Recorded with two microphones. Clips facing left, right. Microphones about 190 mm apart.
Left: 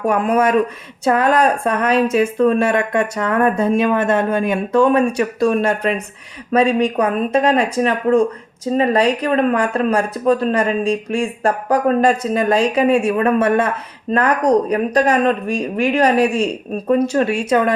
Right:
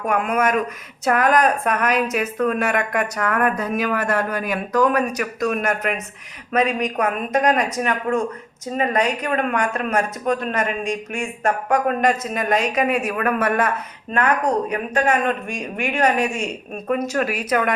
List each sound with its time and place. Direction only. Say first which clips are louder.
0.0 s speech: left 5 dB; 30° left (ahead or behind)